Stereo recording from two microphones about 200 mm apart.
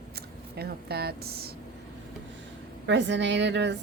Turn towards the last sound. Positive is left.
turn(degrees=-60)  # may be behind; listen again after turning